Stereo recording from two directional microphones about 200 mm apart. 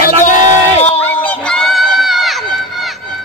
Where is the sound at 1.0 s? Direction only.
10° left (ahead or behind).